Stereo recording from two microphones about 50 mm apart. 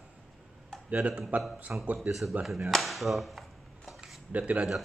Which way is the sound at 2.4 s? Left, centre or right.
Centre.